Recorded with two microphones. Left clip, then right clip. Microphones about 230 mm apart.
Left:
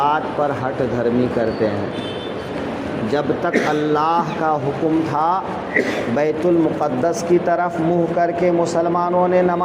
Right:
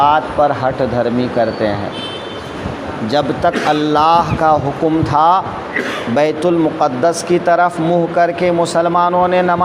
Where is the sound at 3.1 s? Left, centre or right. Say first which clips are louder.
Right 5 dB; right.